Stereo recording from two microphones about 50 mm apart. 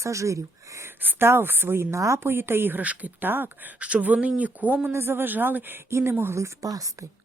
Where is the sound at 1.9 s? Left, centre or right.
Right.